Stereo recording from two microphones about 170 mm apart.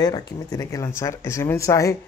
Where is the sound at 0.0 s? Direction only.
20° left (ahead or behind).